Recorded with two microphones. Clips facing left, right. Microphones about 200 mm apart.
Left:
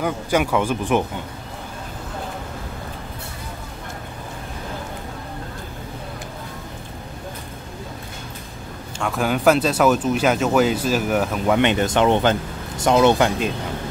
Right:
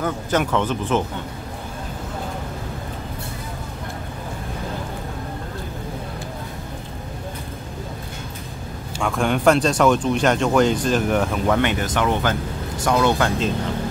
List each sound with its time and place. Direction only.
0.0 s speech: 10° left (ahead or behind)
9.0 s speech: 5° left (ahead or behind)
11.6 s speech: 25° left (ahead or behind)